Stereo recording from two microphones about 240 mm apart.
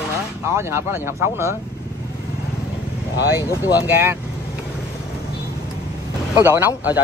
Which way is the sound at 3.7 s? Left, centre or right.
Centre.